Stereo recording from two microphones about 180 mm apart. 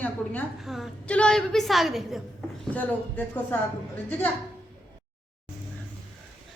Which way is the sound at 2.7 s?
10° left (ahead or behind).